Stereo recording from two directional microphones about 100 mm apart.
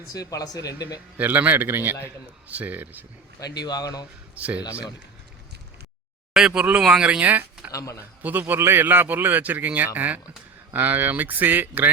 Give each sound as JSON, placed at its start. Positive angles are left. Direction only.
{"t": 0.1, "sound": "speech", "side_deg": 35}
{"t": 1.2, "sound": "a man's voice", "side_deg": -15}
{"t": 3.6, "sound": "speech", "side_deg": 40}
{"t": 4.4, "sound": "speech", "side_deg": -15}
{"t": 6.3, "sound": "speech", "side_deg": -10}
{"t": 7.7, "sound": "speech", "side_deg": 30}
{"t": 8.2, "sound": "a man's voice", "side_deg": -20}